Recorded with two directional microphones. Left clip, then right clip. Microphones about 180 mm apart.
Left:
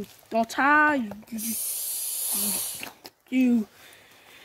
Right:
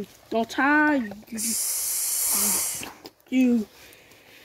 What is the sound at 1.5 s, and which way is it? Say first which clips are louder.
Hiss: right 6 dB; 25° right (ahead or behind).